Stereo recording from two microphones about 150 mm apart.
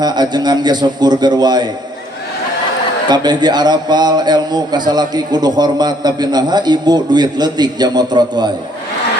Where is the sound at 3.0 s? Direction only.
30° right (ahead or behind).